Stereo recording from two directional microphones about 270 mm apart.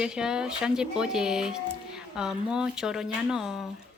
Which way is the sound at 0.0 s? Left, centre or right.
Centre.